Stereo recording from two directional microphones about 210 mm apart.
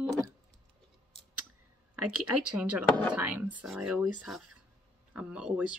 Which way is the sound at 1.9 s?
90° right.